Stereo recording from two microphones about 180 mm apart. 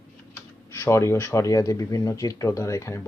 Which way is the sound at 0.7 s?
15° left (ahead or behind).